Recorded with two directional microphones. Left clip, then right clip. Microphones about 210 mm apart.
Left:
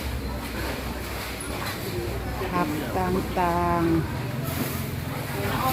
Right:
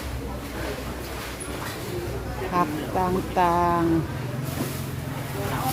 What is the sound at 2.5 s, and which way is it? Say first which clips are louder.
Speech: right 3 dB; 20° right (ahead or behind).